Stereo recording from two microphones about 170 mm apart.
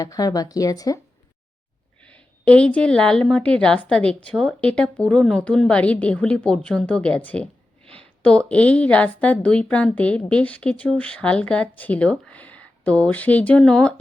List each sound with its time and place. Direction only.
0.0 s speech: 20° left (ahead or behind)
2.0 s a woman's voice: 5° left (ahead or behind)